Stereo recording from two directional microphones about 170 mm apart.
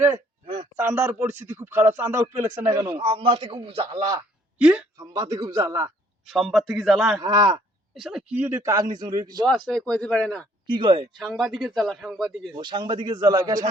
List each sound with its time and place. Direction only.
0.8 s speech: 15° right (ahead or behind)
3.0 s a man's voice: 35° right (ahead or behind)
3.9 s speech: 15° right (ahead or behind)
4.9 s speech: 20° right (ahead or behind)
6.2 s a man's voice: centre (ahead or behind)
7.2 s speech: 25° right (ahead or behind)
7.9 s speech: 5° right (ahead or behind); by 9.5 s 25° right (ahead or behind)
9.6 s a man's voice: 5° left (ahead or behind)
10.7 s speech: 30° right (ahead or behind)
11.2 s a man's voice: centre (ahead or behind)
12.5 s speech: 25° right (ahead or behind)